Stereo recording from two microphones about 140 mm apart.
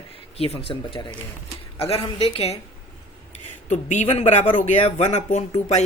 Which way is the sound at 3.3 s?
55° left (ahead or behind).